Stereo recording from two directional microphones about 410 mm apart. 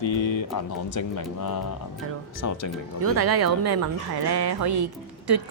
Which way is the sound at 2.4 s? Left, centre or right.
Left.